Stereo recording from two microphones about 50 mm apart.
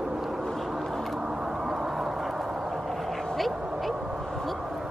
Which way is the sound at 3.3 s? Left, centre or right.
Centre.